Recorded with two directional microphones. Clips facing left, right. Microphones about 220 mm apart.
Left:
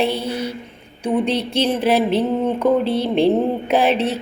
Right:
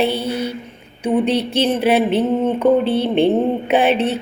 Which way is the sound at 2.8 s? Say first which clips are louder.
Right 2 dB; 30° right (ahead or behind).